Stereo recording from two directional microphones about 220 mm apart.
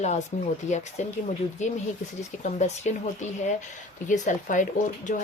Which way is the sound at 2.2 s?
30° left (ahead or behind).